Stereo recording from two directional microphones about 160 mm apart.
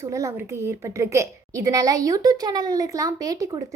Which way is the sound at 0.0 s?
20° right (ahead or behind).